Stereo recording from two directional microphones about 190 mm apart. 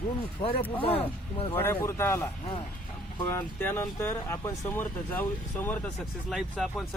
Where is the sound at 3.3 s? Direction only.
10° left (ahead or behind).